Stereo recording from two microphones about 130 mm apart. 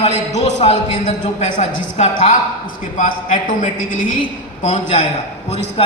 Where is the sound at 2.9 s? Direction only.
90° left.